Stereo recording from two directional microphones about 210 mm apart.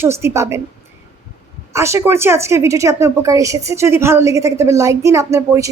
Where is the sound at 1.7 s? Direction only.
15° right (ahead or behind).